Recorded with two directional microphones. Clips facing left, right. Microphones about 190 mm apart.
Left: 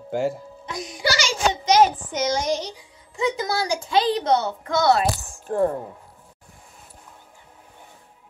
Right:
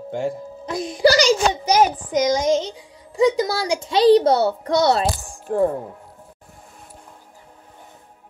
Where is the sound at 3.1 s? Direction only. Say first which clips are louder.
Right 6 dB; 35° right (ahead or behind).